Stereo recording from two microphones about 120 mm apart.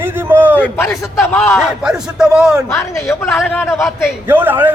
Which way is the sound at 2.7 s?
20° left (ahead or behind).